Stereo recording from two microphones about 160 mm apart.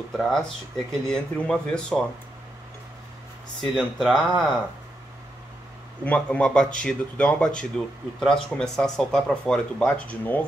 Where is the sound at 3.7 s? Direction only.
Centre (ahead or behind).